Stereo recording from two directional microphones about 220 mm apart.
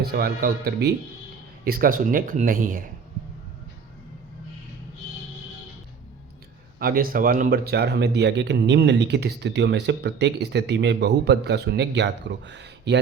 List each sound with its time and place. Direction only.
0.0 s speech: 45° right (ahead or behind)
6.7 s speech: 40° right (ahead or behind)